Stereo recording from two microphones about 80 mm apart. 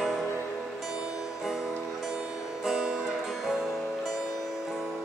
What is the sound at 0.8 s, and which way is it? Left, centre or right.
Music, centre.